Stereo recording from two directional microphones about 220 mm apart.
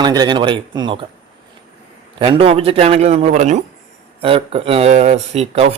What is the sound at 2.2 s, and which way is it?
Speech, 25° right (ahead or behind).